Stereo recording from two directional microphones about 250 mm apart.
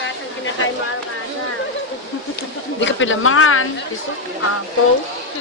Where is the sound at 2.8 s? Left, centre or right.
Left.